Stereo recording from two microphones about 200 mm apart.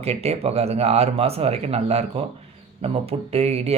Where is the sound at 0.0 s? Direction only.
30° right (ahead or behind).